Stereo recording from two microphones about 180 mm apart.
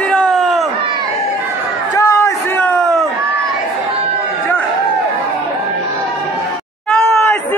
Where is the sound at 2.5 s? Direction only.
5° left (ahead or behind).